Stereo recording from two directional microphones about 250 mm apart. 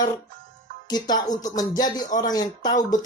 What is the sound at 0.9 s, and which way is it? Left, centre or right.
Speech, centre.